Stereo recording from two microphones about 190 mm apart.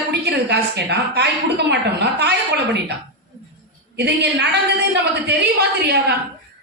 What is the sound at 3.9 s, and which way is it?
A woman's voice, 60° right (ahead or behind).